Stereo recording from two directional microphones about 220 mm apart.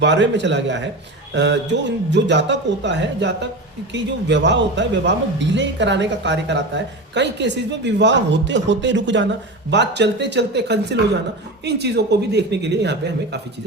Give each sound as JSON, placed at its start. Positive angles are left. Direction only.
{"t": 0.0, "sound": "speech", "side_deg": -55}